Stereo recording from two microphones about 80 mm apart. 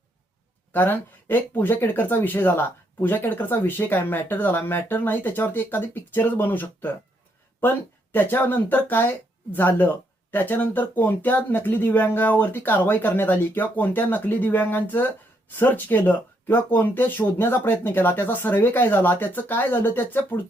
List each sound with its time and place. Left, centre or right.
0.7 s speech: left